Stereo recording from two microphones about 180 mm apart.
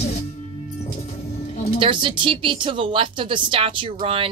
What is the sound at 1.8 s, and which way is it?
Speech, 25° right (ahead or behind).